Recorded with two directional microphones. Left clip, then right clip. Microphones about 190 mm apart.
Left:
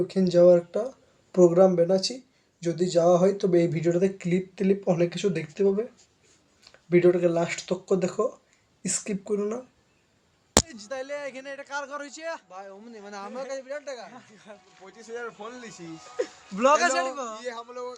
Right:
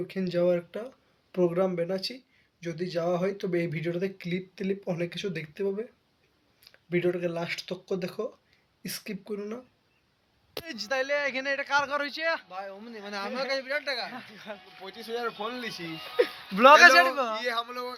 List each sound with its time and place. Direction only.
0.1 s speech: centre (ahead or behind)
10.7 s speech: 5° left (ahead or behind)
12.5 s speech: 65° left (ahead or behind)
13.5 s speech: 30° left (ahead or behind)
14.1 s speech: 25° right (ahead or behind)
15.8 s speech: 15° right (ahead or behind)
16.6 s speech: centre (ahead or behind)
17.3 s speech: 15° left (ahead or behind)